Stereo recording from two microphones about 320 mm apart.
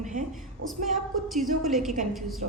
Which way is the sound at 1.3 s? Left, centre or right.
Centre.